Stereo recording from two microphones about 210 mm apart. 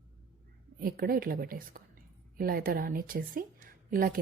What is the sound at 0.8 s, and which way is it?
A woman's voice, 45° right (ahead or behind).